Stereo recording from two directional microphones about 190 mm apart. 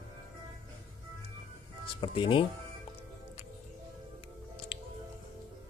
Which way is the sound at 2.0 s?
25° left (ahead or behind).